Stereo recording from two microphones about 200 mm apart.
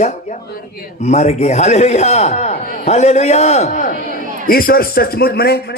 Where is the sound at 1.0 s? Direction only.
35° left (ahead or behind).